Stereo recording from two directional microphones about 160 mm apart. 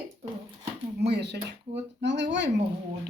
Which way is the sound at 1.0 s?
90° right.